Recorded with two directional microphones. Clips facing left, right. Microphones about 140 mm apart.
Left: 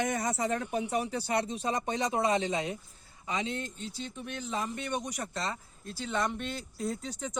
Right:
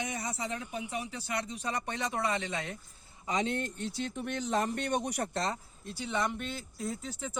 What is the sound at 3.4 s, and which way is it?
Speech, 55° right (ahead or behind).